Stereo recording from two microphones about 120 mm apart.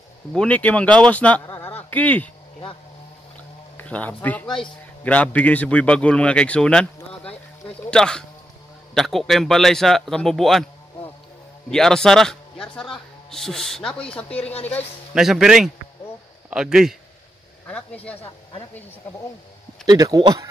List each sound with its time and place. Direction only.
0.3 s speech: 10° left (ahead or behind)
3.7 s a man's voice: 10° left (ahead or behind)
11.7 s a man's voice: 5° left (ahead or behind)
15.1 s a man's voice: 5° right (ahead or behind)
17.6 s speech: 10° left (ahead or behind)
19.9 s speech: 35° right (ahead or behind)